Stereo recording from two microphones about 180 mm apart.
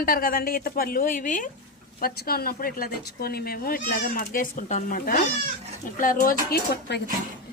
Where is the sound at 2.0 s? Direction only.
60° left (ahead or behind).